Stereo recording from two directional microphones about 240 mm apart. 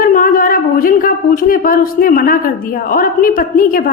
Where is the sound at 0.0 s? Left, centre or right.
Left.